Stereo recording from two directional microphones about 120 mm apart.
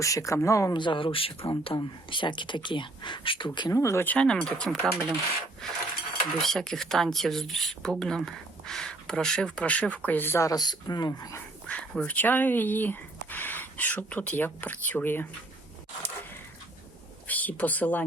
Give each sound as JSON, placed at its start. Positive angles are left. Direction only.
{"t": 0.0, "sound": "speech", "side_deg": 25}
{"t": 0.7, "sound": "speech", "side_deg": 40}
{"t": 3.7, "sound": "speech", "side_deg": 25}
{"t": 10.5, "sound": "speech", "side_deg": 35}
{"t": 11.7, "sound": "speech", "side_deg": 10}
{"t": 17.2, "sound": "speech", "side_deg": 15}